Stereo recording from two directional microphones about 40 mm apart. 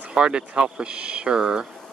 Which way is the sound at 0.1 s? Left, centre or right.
Right.